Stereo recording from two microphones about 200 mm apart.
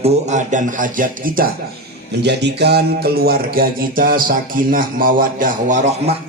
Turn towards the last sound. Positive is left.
turn(degrees=-35)  # may be behind; listen again after turning